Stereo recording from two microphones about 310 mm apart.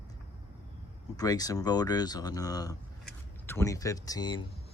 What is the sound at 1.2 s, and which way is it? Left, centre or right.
Speech, centre.